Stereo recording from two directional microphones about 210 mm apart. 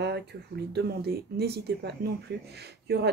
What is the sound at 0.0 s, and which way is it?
Speech, 50° right (ahead or behind).